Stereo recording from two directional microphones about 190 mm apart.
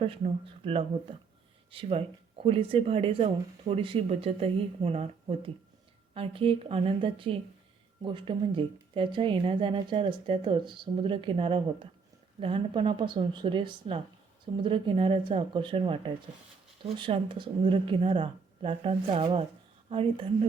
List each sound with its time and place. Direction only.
0.6 s speech: 30° right (ahead or behind)